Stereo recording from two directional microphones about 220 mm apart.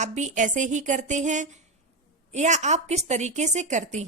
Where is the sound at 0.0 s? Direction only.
30° right (ahead or behind).